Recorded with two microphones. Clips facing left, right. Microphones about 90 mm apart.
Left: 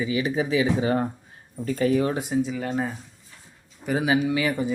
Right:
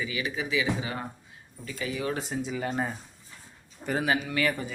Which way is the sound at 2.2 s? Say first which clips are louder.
Left 6 dB; 5° left (ahead or behind).